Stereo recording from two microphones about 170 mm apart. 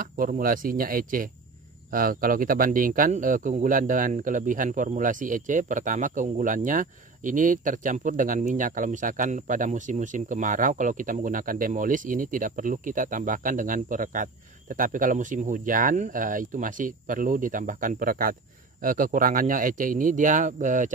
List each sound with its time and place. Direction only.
0.0 s speech: 55° right (ahead or behind)